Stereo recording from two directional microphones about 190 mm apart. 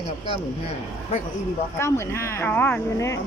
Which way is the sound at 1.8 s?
15° left (ahead or behind).